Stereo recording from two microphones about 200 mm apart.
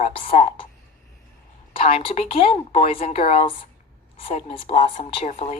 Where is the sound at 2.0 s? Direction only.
25° left (ahead or behind).